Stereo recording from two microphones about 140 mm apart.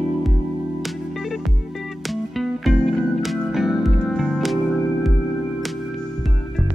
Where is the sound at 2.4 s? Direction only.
Centre (ahead or behind).